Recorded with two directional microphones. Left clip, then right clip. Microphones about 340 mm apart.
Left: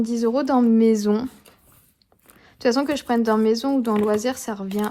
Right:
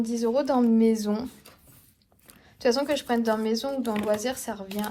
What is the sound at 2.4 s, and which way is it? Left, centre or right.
A woman's voice, left.